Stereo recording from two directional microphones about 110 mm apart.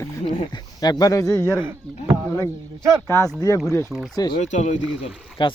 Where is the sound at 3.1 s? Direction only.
30° left (ahead or behind).